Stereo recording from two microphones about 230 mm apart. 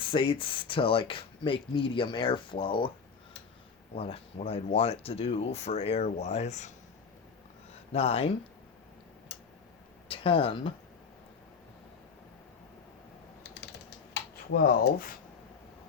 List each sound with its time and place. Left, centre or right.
0.0 s speech: left
3.9 s speech: left
7.9 s speech: left
10.1 s speech: left
14.1 s a sound: left